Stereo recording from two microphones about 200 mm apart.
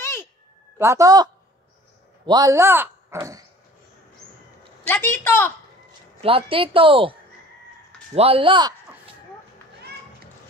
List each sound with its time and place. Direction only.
0.0 s a sound: 15° left (ahead or behind)
0.7 s a woman's voice: 15° right (ahead or behind)
4.8 s a woman's voice: 10° left (ahead or behind)
6.2 s speech: 25° right (ahead or behind)